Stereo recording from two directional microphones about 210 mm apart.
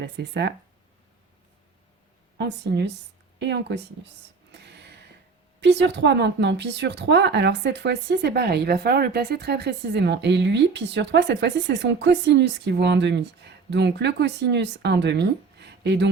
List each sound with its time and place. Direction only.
0.0 s speech: 55° right (ahead or behind)
2.4 s speech: 55° right (ahead or behind)
4.5 s gasp: 55° right (ahead or behind)
5.5 s speech: 55° right (ahead or behind)